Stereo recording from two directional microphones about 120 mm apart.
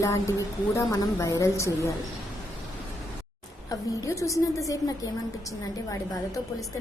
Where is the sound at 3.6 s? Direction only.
25° left (ahead or behind).